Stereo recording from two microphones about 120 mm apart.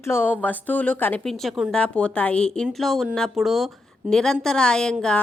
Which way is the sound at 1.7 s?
10° left (ahead or behind).